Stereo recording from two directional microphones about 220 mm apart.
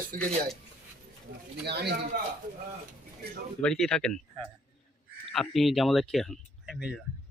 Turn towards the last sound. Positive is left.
turn(degrees=0)  # may be behind; listen again after turning